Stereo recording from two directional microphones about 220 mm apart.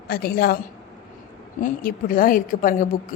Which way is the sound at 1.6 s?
40° left (ahead or behind).